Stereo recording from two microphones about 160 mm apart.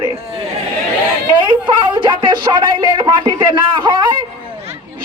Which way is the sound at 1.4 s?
30° right (ahead or behind).